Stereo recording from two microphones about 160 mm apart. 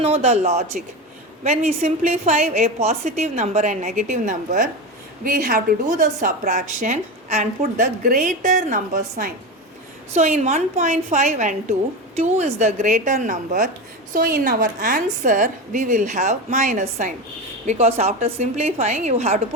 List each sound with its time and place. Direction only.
0.0 s a woman's voice: 40° right (ahead or behind)
7.6 s a woman's voice: 60° right (ahead or behind)
10.2 s a woman's voice: 45° right (ahead or behind)